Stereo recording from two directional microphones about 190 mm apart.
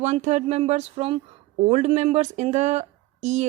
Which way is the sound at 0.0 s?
40° right (ahead or behind).